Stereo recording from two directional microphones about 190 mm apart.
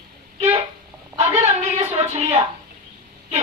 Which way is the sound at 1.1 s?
35° right (ahead or behind).